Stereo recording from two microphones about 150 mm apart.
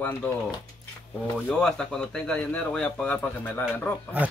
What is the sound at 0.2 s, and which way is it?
Speech, 10° left (ahead or behind).